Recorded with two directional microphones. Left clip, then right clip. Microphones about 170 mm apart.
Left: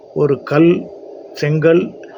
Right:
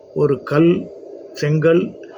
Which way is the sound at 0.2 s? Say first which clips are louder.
Left 2 dB; 20° right (ahead or behind).